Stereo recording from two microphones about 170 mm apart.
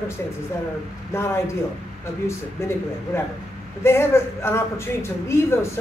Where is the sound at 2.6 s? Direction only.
15° left (ahead or behind).